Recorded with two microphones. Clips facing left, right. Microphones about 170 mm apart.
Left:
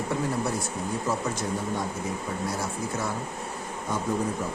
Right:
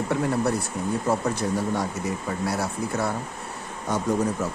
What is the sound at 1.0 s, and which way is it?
Speech, 60° right (ahead or behind).